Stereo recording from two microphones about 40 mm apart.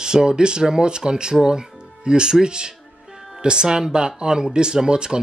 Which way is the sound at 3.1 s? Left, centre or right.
Centre.